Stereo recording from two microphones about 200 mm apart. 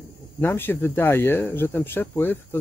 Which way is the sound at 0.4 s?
10° left (ahead or behind).